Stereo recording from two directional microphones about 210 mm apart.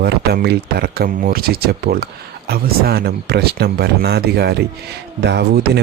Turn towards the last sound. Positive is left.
turn(degrees=-55)  # may be behind; listen again after turning